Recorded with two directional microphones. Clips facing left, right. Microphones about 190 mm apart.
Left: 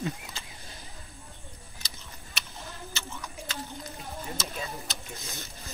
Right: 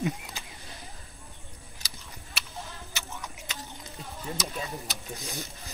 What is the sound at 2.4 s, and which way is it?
Tick-tock, 5° right (ahead or behind).